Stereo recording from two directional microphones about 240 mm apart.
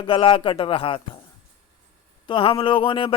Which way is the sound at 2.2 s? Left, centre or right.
Left.